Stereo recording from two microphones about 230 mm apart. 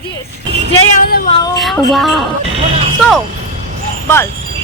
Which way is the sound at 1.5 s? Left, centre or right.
Centre.